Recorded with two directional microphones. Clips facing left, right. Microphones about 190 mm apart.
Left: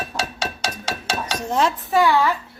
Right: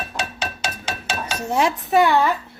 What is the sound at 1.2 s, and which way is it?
Dishes, 10° right (ahead or behind).